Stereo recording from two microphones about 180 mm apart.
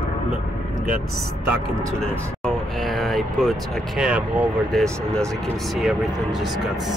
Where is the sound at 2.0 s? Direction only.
Centre (ahead or behind).